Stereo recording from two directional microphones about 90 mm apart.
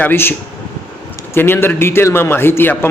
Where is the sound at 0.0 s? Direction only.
20° left (ahead or behind).